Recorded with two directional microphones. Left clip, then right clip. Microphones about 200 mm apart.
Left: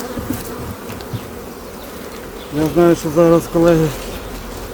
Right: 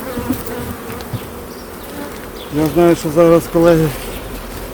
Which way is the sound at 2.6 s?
15° right (ahead or behind).